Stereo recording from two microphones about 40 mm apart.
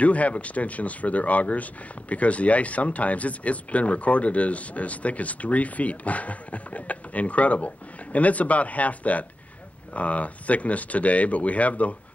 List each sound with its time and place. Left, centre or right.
0.0 s speech: left